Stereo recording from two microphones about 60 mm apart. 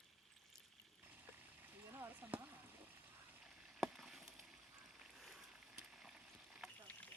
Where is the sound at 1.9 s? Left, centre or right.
Right.